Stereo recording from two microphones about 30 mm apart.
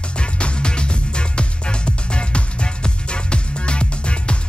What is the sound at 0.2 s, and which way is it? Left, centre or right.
Music, left.